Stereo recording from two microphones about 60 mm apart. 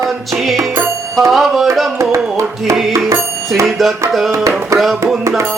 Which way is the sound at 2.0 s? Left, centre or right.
Right.